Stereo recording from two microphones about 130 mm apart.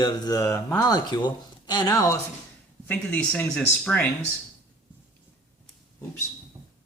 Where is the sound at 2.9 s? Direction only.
10° left (ahead or behind).